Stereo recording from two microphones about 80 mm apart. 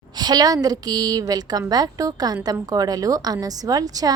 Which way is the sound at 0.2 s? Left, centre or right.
Right.